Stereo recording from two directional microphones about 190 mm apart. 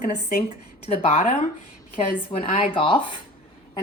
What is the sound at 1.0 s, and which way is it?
Speech, 35° left (ahead or behind).